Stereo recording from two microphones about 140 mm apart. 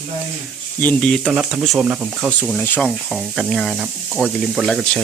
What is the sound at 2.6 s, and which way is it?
Speech, 10° left (ahead or behind).